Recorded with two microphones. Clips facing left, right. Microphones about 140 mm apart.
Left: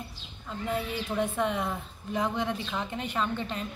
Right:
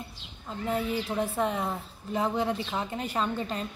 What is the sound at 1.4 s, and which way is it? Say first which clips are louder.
A woman's voice: even; 35° right (ahead or behind).